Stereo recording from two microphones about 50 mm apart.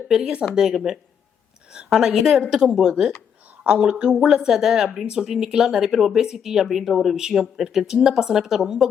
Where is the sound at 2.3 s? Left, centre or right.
Centre.